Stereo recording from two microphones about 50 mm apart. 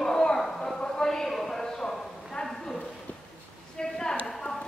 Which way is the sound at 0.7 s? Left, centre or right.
Centre.